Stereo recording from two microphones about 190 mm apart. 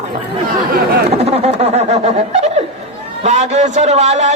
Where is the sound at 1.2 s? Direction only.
35° right (ahead or behind).